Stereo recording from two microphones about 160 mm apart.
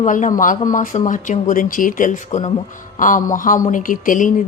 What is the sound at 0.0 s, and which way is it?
A woman's voice, 55° left (ahead or behind).